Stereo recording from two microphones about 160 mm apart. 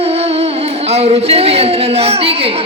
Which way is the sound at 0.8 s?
40° right (ahead or behind).